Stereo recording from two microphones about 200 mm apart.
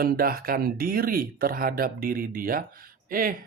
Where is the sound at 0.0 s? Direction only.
50° right (ahead or behind).